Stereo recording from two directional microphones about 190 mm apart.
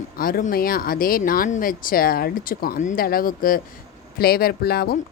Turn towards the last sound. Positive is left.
turn(degrees=55)  # may be behind; listen again after turning